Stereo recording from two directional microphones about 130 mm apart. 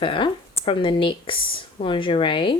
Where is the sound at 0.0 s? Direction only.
40° left (ahead or behind).